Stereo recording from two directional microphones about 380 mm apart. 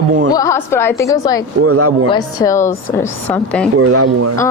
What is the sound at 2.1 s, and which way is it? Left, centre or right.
A woman's voice, centre.